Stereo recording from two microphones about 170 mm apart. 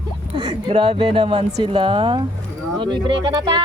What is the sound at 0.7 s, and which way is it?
Speech, 30° right (ahead or behind).